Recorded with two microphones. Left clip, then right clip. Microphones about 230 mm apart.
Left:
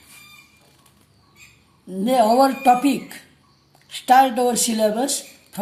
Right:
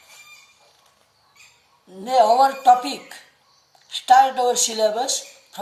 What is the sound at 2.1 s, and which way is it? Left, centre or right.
A woman's voice, left.